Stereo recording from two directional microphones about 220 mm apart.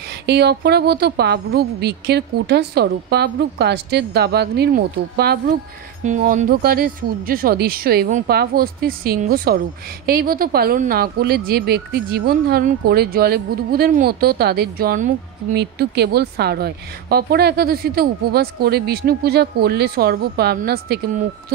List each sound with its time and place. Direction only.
0.3 s speech: 50° right (ahead or behind)
6.0 s speech: 35° right (ahead or behind)